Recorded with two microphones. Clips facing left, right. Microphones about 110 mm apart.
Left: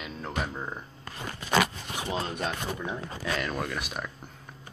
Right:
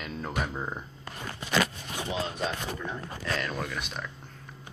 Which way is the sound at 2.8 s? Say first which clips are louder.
Left 2 dB; 5° left (ahead or behind).